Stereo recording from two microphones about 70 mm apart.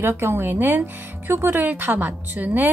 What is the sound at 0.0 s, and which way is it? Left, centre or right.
A woman's voice, right.